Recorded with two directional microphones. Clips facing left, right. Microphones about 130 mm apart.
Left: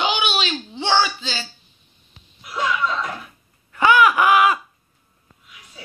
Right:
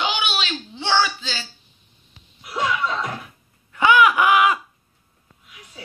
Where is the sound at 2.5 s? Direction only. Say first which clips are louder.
Left 1 dB; 15° right (ahead or behind).